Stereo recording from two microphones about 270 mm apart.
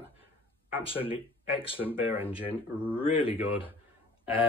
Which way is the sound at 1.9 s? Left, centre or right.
Centre.